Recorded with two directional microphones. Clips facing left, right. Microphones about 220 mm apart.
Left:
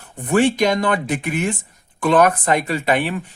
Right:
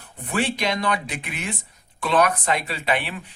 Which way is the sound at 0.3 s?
45° left (ahead or behind).